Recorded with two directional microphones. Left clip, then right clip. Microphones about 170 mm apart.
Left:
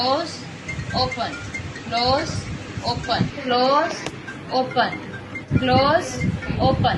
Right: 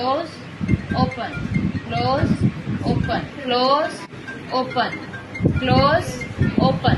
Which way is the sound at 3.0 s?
25° right (ahead or behind).